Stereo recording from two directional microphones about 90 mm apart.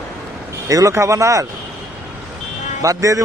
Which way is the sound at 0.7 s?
35° right (ahead or behind).